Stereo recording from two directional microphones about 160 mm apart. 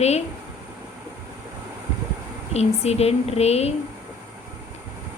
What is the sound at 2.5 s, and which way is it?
A woman's voice, 40° left (ahead or behind).